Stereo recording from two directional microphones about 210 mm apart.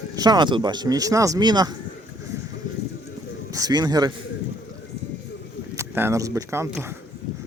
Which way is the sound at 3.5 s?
15° right (ahead or behind).